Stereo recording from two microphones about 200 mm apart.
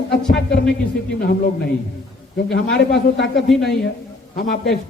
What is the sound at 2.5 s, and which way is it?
A man's voice, 55° left (ahead or behind).